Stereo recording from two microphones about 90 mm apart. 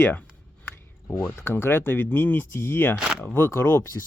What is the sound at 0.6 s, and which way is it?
Speech, 25° left (ahead or behind).